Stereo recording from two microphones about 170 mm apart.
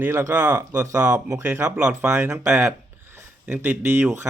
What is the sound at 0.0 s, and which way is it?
Speech, 15° right (ahead or behind).